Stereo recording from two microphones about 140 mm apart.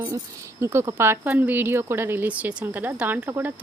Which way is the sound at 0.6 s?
15° right (ahead or behind).